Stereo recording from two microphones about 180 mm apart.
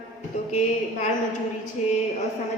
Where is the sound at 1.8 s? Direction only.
40° left (ahead or behind).